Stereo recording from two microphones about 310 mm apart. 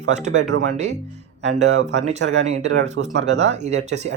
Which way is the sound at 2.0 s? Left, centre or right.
Right.